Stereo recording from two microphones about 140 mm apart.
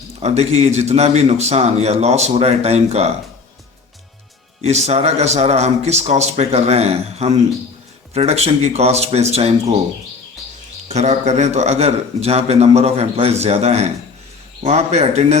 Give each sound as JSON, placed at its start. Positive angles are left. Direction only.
{"t": 0.2, "sound": "a man's voice", "side_deg": -50}
{"t": 4.6, "sound": "a man's voice", "side_deg": -50}
{"t": 10.8, "sound": "a man's voice", "side_deg": -50}